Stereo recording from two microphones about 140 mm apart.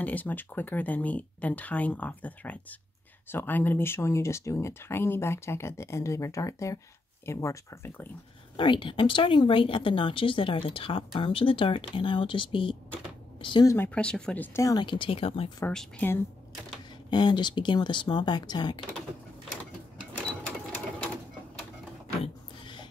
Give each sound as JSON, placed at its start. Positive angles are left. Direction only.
{"t": 0.0, "sound": "speech", "side_deg": 10}
{"t": 8.5, "sound": "speech", "side_deg": 35}
{"t": 13.8, "sound": "speech", "side_deg": 5}
{"t": 15.6, "sound": "speech", "side_deg": 10}
{"t": 17.1, "sound": "speech", "side_deg": 30}
{"t": 22.2, "sound": "a sound", "side_deg": 35}